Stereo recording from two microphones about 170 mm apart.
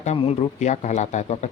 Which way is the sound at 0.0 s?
40° left (ahead or behind).